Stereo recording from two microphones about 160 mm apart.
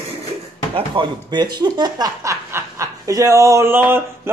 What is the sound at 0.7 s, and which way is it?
Speech, 30° right (ahead or behind).